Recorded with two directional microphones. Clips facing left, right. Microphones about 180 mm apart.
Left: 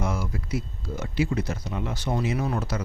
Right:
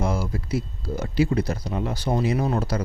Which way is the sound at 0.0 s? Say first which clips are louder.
Right 3 dB; 30° right (ahead or behind).